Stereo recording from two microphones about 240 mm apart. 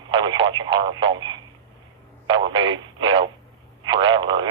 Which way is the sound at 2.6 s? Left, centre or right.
Centre.